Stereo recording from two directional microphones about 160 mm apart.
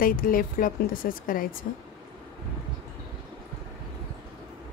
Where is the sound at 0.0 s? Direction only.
60° left (ahead or behind).